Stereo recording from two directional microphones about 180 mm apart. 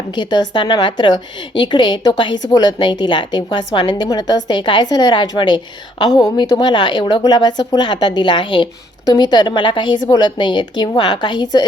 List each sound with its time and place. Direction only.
0.1 s speech: 25° left (ahead or behind)